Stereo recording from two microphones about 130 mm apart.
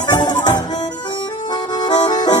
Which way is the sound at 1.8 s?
35° left (ahead or behind).